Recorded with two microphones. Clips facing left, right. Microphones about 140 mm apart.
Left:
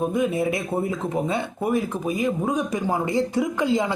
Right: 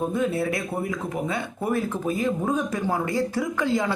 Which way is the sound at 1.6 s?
15° left (ahead or behind).